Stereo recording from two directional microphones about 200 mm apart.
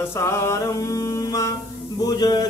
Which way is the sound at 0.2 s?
15° left (ahead or behind).